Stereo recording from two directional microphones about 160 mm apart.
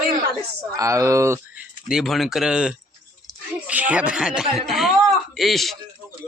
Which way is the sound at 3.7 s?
10° right (ahead or behind).